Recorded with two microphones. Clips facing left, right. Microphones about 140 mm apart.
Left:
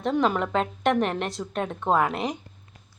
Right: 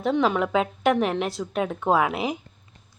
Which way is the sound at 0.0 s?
Centre (ahead or behind).